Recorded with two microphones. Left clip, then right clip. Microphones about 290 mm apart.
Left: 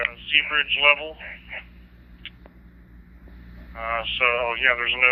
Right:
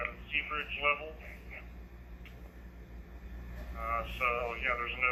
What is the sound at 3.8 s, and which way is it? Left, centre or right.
Speech, centre.